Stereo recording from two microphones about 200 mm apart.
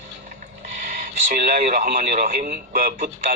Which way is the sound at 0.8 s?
40° right (ahead or behind).